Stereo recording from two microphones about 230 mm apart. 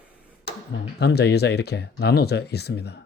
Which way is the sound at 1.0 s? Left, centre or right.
Left.